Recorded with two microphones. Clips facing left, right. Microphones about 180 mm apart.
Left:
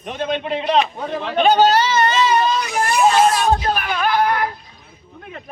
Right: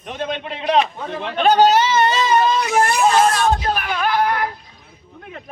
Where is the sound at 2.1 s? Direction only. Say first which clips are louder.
Left 1 dB; 40° right (ahead or behind).